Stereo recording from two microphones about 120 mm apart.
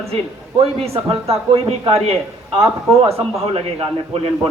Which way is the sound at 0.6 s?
55° right (ahead or behind).